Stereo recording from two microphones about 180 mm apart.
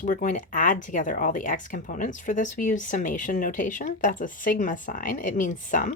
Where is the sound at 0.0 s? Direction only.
45° left (ahead or behind).